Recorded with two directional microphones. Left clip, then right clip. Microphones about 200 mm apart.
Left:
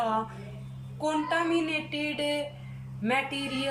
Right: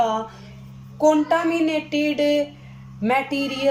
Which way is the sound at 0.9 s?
35° right (ahead or behind).